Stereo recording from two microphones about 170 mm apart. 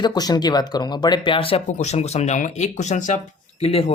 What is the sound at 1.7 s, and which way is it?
Speech, 40° left (ahead or behind).